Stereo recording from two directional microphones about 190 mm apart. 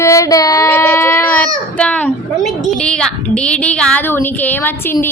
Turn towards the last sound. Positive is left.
turn(degrees=10)  # may be behind; listen again after turning